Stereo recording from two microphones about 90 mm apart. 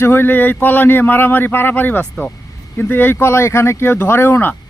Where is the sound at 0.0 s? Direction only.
25° left (ahead or behind).